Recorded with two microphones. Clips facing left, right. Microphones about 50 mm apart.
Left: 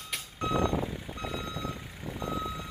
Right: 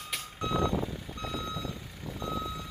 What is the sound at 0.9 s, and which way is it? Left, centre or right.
Reversing beeps, left.